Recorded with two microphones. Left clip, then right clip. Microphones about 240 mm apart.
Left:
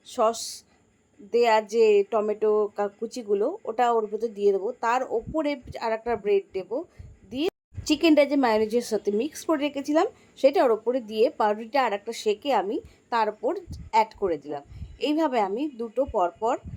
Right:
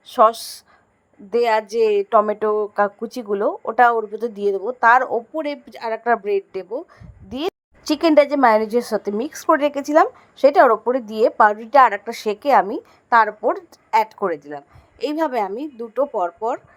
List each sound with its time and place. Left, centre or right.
0.1 s a woman's voice: centre